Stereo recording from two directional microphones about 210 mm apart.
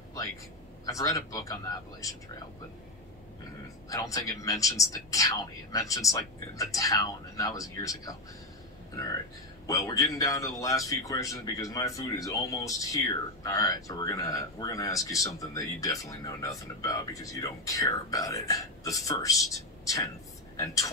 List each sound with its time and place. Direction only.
0.8 s a man's voice: 15° left (ahead or behind)
3.9 s a man's voice: 15° left (ahead or behind)
9.7 s a man's voice: 15° left (ahead or behind)